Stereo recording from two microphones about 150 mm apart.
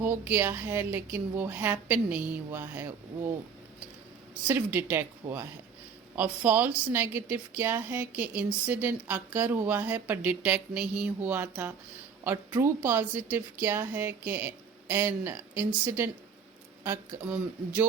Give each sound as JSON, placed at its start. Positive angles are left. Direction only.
{"t": 0.0, "sound": "a woman's voice", "side_deg": -10}
{"t": 4.4, "sound": "a woman's voice", "side_deg": -10}